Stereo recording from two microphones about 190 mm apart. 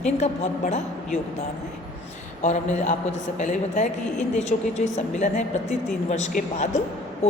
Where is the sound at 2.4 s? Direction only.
40° left (ahead or behind).